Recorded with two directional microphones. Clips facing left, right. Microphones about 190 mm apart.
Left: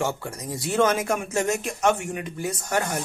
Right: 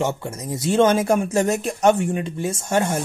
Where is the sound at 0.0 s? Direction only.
20° right (ahead or behind).